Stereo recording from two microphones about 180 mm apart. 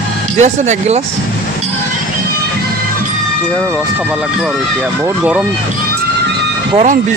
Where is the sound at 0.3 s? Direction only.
40° right (ahead or behind).